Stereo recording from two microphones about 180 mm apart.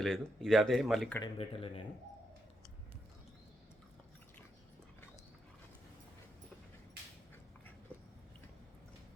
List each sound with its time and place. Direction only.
0.0 s speech: centre (ahead or behind)
1.2 s speech: 30° left (ahead or behind)
7.9 s a sound: 10° left (ahead or behind)